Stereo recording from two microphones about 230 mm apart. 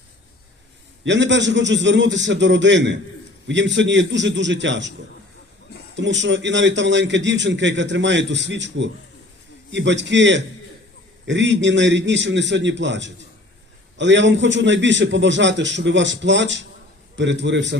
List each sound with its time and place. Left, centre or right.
1.0 s a man's voice: right
6.0 s a man's voice: right